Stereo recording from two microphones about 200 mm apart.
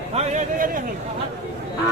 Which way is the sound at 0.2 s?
40° right (ahead or behind).